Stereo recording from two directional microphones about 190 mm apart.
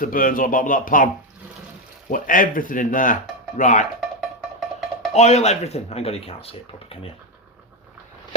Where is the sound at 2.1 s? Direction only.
45° left (ahead or behind).